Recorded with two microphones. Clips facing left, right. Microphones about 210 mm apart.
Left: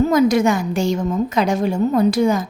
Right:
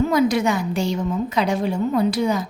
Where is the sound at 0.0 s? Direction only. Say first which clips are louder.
Left 4 dB; 45° left (ahead or behind).